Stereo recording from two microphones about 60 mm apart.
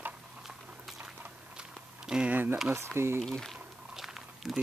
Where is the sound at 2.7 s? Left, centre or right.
Right.